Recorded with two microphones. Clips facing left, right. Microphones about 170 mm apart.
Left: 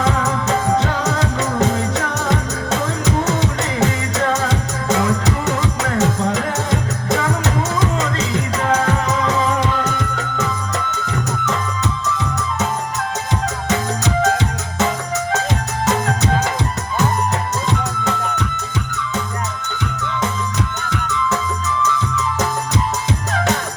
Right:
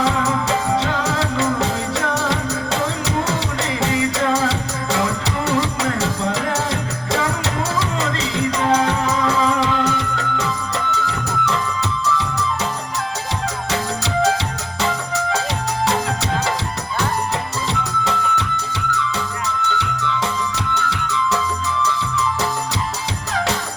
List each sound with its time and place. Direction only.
0.0 s music: 45° left (ahead or behind)
9.2 s music: 45° left (ahead or behind)
13.7 s music: 45° left (ahead or behind)
17.7 s music: 45° left (ahead or behind)
19.6 s music: 45° left (ahead or behind)